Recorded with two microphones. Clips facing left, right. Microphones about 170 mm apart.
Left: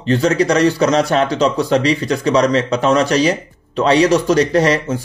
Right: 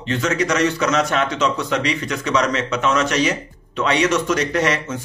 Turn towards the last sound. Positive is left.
turn(degrees=35)  # may be behind; listen again after turning